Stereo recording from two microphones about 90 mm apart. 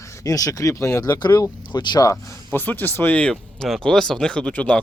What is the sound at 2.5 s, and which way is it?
Speech, 20° left (ahead or behind).